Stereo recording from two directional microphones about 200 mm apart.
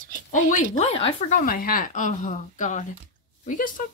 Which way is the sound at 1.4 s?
45° left (ahead or behind).